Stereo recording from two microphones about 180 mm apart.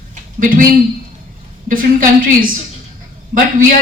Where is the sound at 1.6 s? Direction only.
50° right (ahead or behind).